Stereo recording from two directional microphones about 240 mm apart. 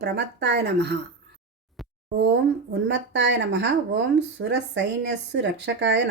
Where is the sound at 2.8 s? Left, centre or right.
Right.